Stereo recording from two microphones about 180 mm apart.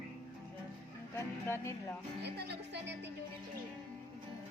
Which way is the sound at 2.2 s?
65° right (ahead or behind).